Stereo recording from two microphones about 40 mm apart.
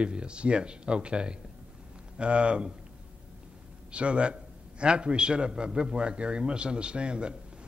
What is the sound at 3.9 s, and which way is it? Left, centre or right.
A man's voice, right.